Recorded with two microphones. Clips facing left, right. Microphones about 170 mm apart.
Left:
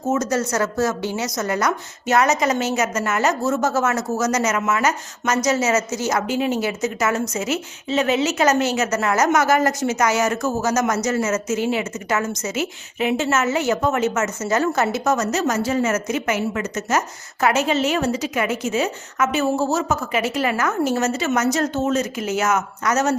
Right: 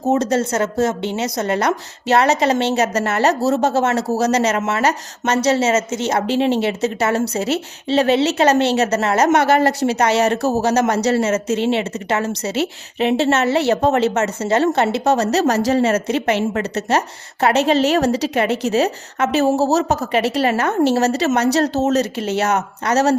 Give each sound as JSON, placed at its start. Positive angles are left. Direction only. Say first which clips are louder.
{"t": 0.1, "sound": "a woman's voice", "louder": "right 4 dB", "side_deg": -30}